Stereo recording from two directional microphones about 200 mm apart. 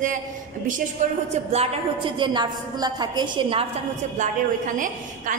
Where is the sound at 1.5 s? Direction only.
25° right (ahead or behind).